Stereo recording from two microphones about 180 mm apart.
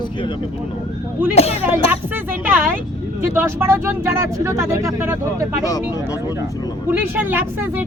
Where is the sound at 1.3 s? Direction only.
35° left (ahead or behind).